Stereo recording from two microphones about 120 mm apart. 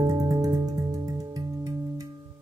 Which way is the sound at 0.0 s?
30° right (ahead or behind).